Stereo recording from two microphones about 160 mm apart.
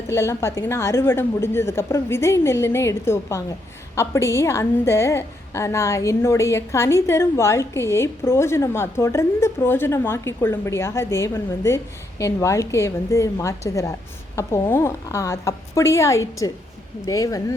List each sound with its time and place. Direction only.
0.1 s a woman's voice: 15° left (ahead or behind)